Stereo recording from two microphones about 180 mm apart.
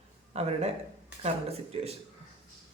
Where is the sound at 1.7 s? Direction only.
30° right (ahead or behind).